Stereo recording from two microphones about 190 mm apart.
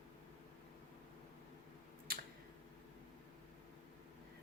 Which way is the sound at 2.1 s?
55° right (ahead or behind).